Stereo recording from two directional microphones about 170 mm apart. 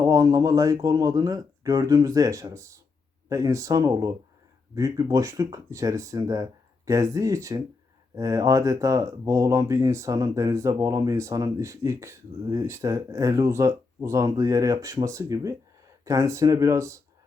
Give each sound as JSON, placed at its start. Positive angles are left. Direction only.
{"t": 0.0, "sound": "speech", "side_deg": -20}